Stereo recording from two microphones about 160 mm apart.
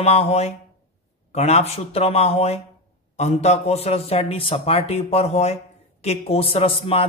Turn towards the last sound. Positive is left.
turn(degrees=35)  # may be behind; listen again after turning